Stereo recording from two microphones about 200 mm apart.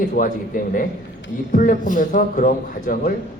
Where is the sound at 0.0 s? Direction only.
40° left (ahead or behind).